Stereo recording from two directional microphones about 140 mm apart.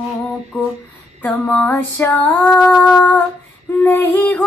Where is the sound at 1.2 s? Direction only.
10° left (ahead or behind).